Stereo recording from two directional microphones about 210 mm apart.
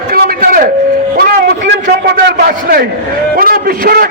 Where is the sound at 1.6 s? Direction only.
50° right (ahead or behind).